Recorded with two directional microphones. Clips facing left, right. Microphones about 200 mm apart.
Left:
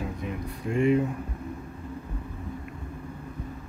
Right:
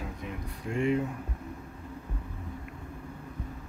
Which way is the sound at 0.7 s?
10° left (ahead or behind).